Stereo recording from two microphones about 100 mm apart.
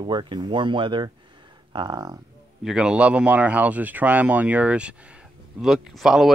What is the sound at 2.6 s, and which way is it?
Speech, 5° right (ahead or behind).